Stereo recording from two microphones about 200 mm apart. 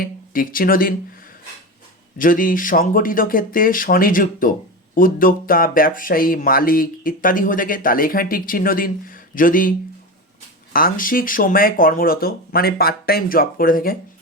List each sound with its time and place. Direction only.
0.0 s speech: 45° left (ahead or behind)
2.1 s speech: 45° left (ahead or behind)